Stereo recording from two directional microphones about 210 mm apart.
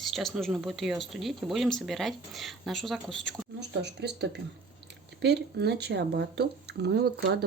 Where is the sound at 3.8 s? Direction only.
50° right (ahead or behind).